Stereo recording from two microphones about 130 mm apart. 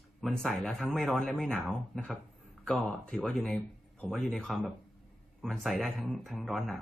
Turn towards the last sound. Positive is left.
turn(degrees=0)  # may be behind; listen again after turning